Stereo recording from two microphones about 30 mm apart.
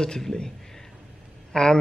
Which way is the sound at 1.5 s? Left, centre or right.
Left.